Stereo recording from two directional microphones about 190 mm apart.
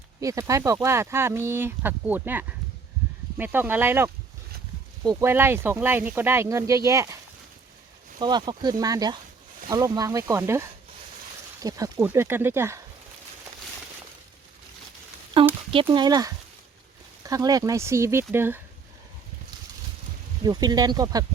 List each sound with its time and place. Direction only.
0.2 s speech: 15° right (ahead or behind)
8.2 s speech: 25° right (ahead or behind)
15.3 s a sound: 25° right (ahead or behind)
15.7 s speech: 25° right (ahead or behind)
20.4 s speech: 20° right (ahead or behind)